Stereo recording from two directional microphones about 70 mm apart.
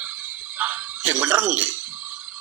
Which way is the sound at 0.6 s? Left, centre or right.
Right.